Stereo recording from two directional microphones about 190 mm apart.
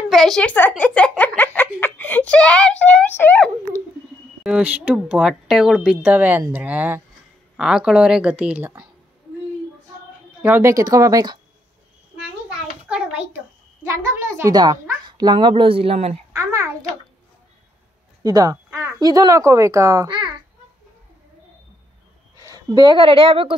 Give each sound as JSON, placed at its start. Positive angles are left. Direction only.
{"t": 0.1, "sound": "speech", "side_deg": 0}
{"t": 4.4, "sound": "speech", "side_deg": -5}
{"t": 10.4, "sound": "speech", "side_deg": -10}
{"t": 12.4, "sound": "a sound", "side_deg": -5}
{"t": 14.4, "sound": "speech", "side_deg": -20}
{"t": 18.2, "sound": "speech", "side_deg": -20}
{"t": 22.4, "sound": "a woman's voice", "side_deg": -15}